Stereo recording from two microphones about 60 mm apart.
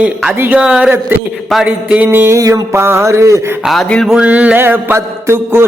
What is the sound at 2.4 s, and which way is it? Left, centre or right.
Mantra, right.